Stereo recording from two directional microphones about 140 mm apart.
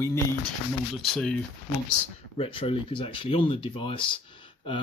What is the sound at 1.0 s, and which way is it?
Speech, centre (ahead or behind).